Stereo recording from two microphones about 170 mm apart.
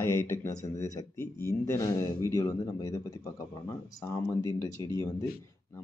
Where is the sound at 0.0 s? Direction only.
15° left (ahead or behind).